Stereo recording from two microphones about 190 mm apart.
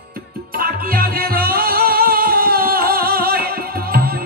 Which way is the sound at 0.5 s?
50° right (ahead or behind).